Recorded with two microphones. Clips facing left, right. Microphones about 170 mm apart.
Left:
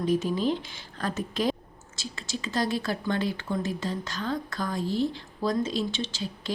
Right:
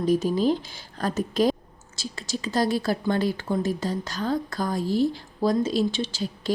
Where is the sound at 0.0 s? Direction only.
40° right (ahead or behind).